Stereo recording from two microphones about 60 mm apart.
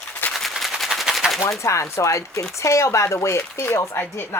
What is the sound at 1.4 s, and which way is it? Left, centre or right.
Speech, left.